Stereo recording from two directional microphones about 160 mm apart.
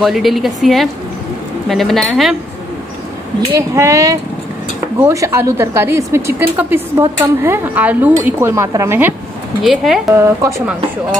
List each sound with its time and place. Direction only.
0.0 s a woman's voice: centre (ahead or behind)
3.5 s a woman's voice: 20° right (ahead or behind)
9.6 s a woman's voice: centre (ahead or behind)
10.0 s a woman's voice: 15° right (ahead or behind)